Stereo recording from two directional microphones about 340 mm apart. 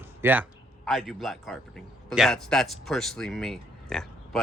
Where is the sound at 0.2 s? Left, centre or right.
Centre.